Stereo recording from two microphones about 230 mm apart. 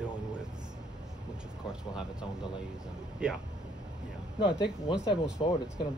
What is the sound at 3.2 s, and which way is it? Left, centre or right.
Speech, centre.